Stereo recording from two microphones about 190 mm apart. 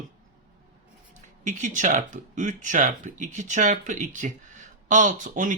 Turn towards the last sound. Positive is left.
turn(degrees=-40)  # may be behind; listen again after turning